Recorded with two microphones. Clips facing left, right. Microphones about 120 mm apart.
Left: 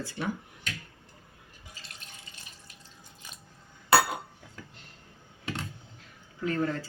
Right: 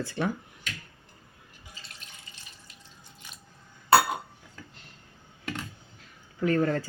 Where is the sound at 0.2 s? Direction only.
65° right (ahead or behind).